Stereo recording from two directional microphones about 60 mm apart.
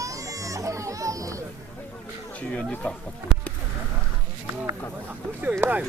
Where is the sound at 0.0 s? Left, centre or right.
Right.